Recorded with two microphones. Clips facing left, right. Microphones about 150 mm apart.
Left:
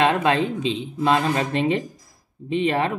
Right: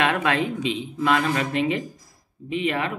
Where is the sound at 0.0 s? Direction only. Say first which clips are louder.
Left 3 dB; 25° left (ahead or behind).